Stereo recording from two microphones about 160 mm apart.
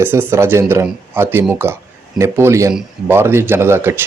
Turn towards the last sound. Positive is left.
turn(degrees=-15)  # may be behind; listen again after turning